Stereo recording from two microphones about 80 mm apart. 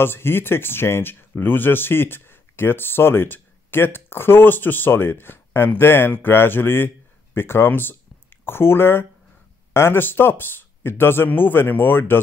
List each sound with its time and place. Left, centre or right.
0.0 s speech: left